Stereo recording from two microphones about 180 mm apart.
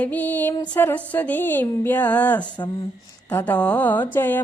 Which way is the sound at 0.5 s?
25° left (ahead or behind).